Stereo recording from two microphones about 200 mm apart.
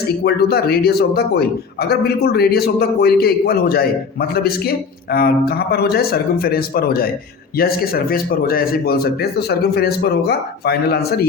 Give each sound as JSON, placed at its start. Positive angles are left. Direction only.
{"t": 0.3, "sound": "a man's voice", "side_deg": 55}